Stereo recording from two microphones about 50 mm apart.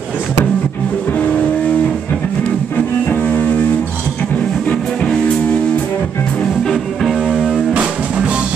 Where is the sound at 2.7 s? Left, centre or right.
Left.